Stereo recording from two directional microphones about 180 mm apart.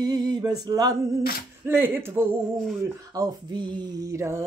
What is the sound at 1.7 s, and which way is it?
Female singing, 10° right (ahead or behind).